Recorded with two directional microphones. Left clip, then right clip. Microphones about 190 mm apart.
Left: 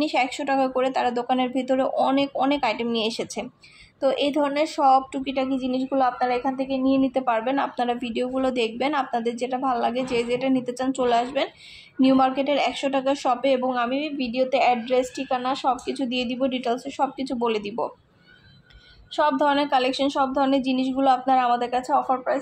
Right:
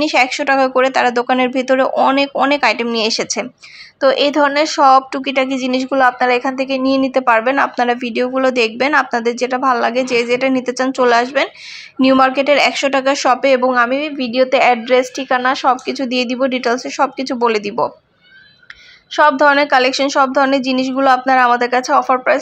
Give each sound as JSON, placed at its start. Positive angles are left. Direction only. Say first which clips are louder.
{"t": 0.0, "sound": "a woman's voice", "louder": "right 10 dB", "side_deg": -15}
{"t": 19.1, "sound": "a woman's voice", "louder": "right 10 dB", "side_deg": -15}